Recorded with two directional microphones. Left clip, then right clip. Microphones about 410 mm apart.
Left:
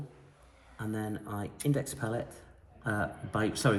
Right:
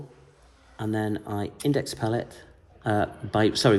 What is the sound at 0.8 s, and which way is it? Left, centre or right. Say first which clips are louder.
Speech: right 9 dB; right.